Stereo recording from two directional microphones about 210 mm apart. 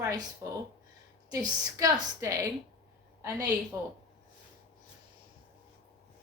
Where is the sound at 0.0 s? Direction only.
15° right (ahead or behind).